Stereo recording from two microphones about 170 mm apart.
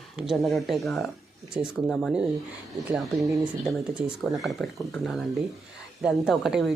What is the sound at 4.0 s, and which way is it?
Speech, 5° right (ahead or behind).